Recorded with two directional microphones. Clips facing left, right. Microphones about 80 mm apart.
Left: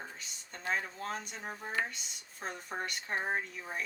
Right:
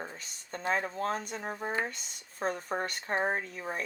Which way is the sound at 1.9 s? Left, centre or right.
Right.